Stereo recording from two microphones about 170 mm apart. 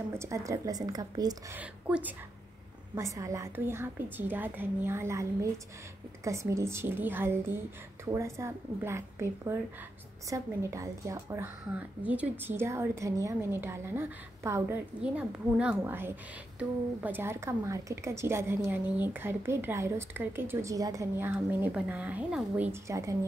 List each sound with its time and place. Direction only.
0.1 s a woman's voice: 15° right (ahead or behind)
1.6 s a woman's voice: 10° right (ahead or behind)